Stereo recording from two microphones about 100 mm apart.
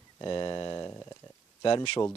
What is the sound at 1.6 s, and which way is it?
Speech, 55° left (ahead or behind).